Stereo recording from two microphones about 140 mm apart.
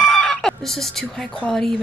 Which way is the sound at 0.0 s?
5° left (ahead or behind).